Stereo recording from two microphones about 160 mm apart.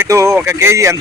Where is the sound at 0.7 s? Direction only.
20° right (ahead or behind).